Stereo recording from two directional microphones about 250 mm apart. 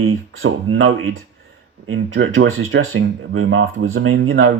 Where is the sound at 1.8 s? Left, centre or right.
Right.